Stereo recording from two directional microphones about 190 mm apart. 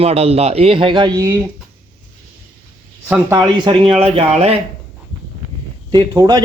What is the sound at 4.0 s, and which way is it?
Speech, 35° right (ahead or behind).